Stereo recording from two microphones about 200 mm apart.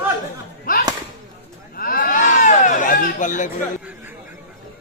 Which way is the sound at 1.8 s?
45° left (ahead or behind).